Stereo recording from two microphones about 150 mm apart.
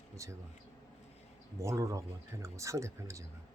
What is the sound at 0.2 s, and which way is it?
Speech, 20° right (ahead or behind).